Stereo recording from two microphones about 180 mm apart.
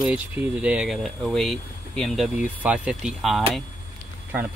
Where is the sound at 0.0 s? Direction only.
5° right (ahead or behind).